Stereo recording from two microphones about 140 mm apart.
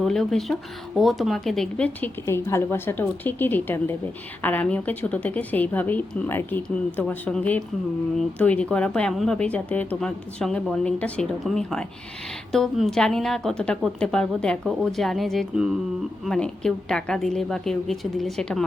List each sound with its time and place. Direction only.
0.0 s a woman's voice: centre (ahead or behind)